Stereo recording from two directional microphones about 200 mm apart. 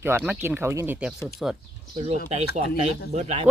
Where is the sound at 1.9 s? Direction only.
35° right (ahead or behind).